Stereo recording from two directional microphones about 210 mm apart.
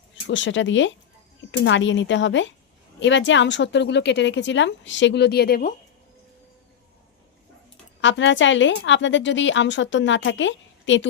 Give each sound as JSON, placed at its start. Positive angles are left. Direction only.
{"t": 0.3, "sound": "a woman's voice", "side_deg": 60}
{"t": 8.0, "sound": "a woman's voice", "side_deg": 60}